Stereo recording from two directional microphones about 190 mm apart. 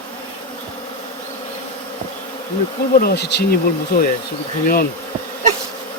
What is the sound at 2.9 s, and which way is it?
Bee, 50° left (ahead or behind).